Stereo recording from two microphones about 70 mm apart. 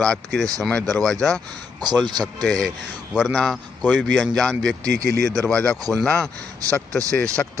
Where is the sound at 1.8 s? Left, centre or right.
Right.